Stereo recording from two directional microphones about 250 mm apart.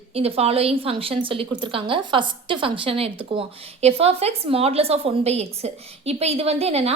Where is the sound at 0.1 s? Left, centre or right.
Right.